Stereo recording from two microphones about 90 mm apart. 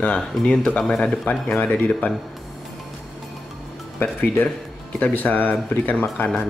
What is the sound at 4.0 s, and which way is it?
Speech, 20° left (ahead or behind).